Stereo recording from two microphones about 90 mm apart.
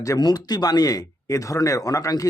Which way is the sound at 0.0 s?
45° left (ahead or behind).